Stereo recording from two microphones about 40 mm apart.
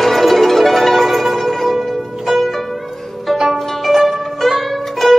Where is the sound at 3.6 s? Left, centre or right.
Centre.